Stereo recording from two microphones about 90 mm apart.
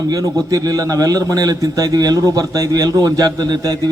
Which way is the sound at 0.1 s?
40° right (ahead or behind).